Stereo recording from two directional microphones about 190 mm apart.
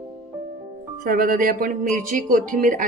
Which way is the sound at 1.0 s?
50° right (ahead or behind).